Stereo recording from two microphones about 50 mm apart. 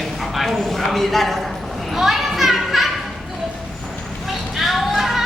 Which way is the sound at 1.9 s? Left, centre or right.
Centre.